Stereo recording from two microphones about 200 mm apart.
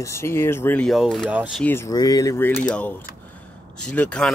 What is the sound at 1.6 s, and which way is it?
Speech, 15° left (ahead or behind).